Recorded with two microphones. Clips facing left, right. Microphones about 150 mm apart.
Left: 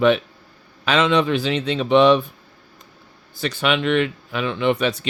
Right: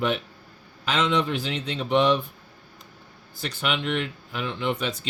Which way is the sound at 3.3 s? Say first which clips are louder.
Left 7 dB; 90° left.